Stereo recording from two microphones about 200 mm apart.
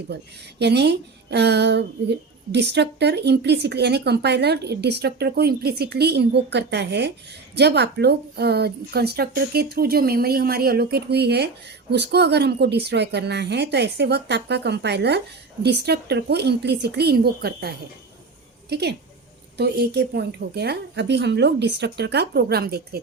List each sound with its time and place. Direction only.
0.6 s a woman's voice: 55° right (ahead or behind)